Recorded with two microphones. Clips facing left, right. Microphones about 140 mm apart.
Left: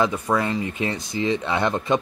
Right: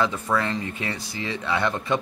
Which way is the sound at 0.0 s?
15° left (ahead or behind).